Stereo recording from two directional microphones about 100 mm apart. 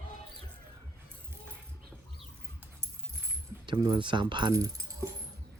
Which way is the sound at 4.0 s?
50° right (ahead or behind).